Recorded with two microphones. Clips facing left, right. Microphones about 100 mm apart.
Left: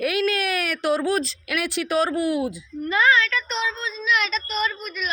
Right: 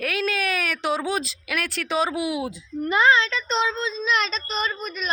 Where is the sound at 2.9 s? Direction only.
25° right (ahead or behind).